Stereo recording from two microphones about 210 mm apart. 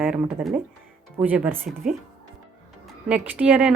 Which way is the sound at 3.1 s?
5° right (ahead or behind).